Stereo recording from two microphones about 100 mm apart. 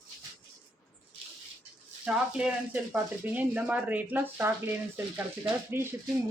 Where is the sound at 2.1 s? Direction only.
10° right (ahead or behind).